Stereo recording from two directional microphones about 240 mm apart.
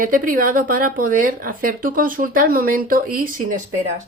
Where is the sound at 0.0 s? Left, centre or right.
Right.